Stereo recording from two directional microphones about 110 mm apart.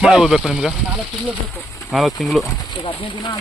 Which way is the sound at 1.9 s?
Centre (ahead or behind).